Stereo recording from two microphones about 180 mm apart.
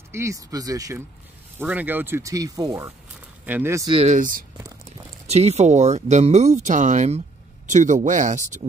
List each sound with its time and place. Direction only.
0.1 s speech: 15° right (ahead or behind)
3.9 s a man's voice: 40° right (ahead or behind)
4.6 s whispering: 20° right (ahead or behind)
5.2 s a man's voice: 35° right (ahead or behind)